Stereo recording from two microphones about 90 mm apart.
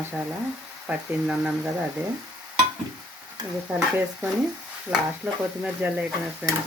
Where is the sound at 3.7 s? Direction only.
25° right (ahead or behind).